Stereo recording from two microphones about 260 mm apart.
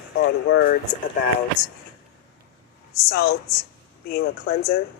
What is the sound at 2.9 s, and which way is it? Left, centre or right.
Speech, left.